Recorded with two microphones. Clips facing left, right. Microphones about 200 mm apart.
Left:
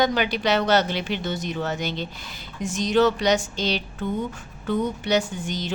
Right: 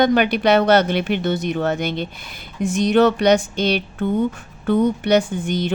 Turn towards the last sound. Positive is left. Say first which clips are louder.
# right 7 dB
turn(degrees=-55)  # may be behind; listen again after turning